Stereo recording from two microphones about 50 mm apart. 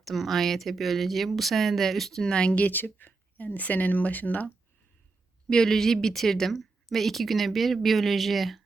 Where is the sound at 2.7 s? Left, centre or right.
Left.